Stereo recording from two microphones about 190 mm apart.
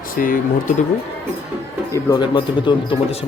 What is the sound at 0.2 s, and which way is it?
Speech, 50° left (ahead or behind).